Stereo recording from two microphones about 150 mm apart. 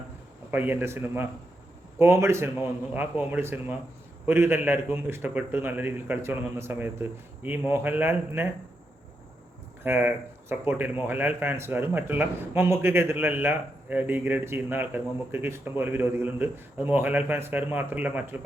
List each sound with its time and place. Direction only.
0.5 s speech: 15° right (ahead or behind)
9.8 s speech: 15° right (ahead or behind)